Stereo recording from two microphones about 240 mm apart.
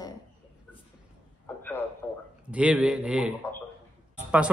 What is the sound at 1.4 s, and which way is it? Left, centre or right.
Speech, centre.